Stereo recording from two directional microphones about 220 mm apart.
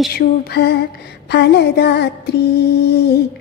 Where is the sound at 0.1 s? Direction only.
45° left (ahead or behind).